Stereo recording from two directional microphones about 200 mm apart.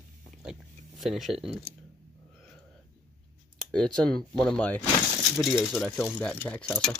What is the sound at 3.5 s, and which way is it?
Speech, 5° left (ahead or behind).